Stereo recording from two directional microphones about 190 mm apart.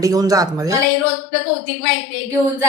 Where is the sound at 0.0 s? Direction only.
20° right (ahead or behind).